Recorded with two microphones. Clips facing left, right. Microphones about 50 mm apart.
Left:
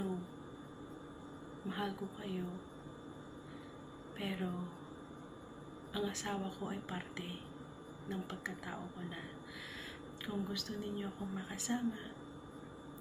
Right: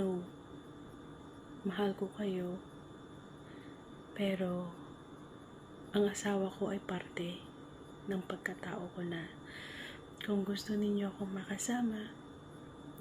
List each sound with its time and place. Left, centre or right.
1.6 s a woman's voice: centre
4.2 s a woman's voice: centre
5.9 s a woman's voice: centre